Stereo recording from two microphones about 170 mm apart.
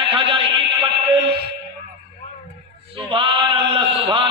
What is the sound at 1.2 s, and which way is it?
Music, 70° right (ahead or behind).